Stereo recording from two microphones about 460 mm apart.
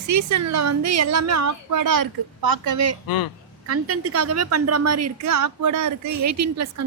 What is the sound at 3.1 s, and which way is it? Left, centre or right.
Speech, left.